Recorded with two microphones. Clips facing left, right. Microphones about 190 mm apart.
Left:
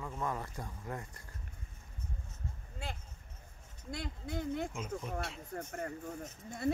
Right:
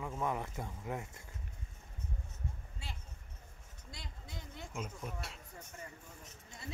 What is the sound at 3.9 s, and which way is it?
Speech, 55° left (ahead or behind).